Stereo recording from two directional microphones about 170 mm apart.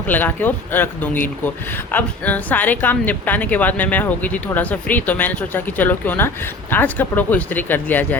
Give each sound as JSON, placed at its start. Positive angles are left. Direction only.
{"t": 0.1, "sound": "speech", "side_deg": 10}